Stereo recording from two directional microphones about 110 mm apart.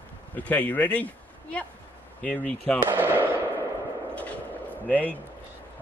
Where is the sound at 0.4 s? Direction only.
15° left (ahead or behind).